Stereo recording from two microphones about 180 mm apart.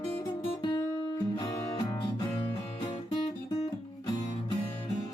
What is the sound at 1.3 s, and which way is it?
Music, 20° left (ahead or behind).